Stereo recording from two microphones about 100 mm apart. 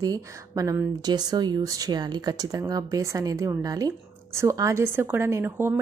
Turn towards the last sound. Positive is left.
turn(degrees=-20)  # may be behind; listen again after turning